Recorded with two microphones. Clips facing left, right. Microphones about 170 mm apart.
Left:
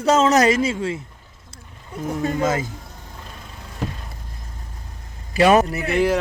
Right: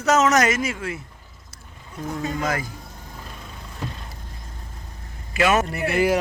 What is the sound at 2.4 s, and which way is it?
Speech, 20° left (ahead or behind).